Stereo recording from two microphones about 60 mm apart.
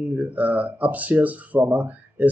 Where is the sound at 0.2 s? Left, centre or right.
Right.